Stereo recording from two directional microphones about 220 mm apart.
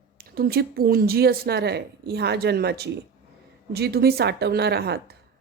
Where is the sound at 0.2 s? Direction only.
45° right (ahead or behind).